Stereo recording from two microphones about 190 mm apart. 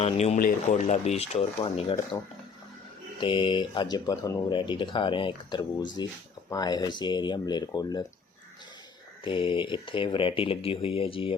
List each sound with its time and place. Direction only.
0.0 s speech: 35° left (ahead or behind)
0.3 s speech: 45° left (ahead or behind)
3.2 s speech: 25° left (ahead or behind)
9.2 s speech: 25° left (ahead or behind)